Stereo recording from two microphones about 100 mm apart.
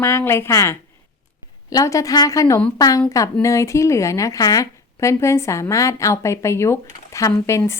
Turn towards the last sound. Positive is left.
turn(degrees=25)  # may be behind; listen again after turning